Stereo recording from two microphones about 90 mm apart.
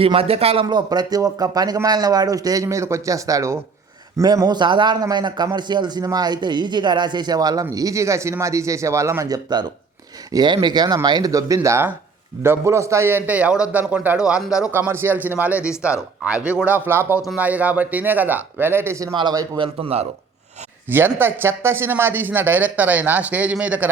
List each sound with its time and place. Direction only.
0.0 s a man's voice: 90° right
0.6 s a man's voice: 55° right (ahead or behind); by 3.6 s 35° right (ahead or behind)
4.2 s a man's voice: 45° right (ahead or behind)
9.3 s a man's voice: 50° right (ahead or behind)
11.3 s speech: 40° right (ahead or behind); by 14.7 s 10° right (ahead or behind)
14.7 s speech: 25° right (ahead or behind)
19.1 s a man's voice: 60° right (ahead or behind)
19.5 s a man's voice: 90° right
20.9 s speech: 25° right (ahead or behind)